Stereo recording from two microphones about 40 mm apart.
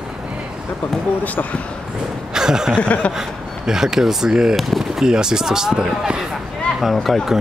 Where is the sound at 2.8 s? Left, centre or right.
Left.